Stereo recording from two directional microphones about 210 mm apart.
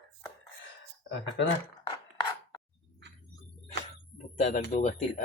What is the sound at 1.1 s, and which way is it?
Speech, 55° left (ahead or behind).